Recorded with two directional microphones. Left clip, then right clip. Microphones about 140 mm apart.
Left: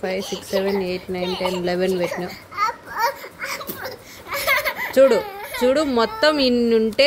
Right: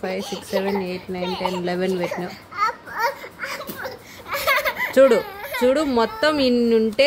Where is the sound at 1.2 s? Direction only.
10° right (ahead or behind).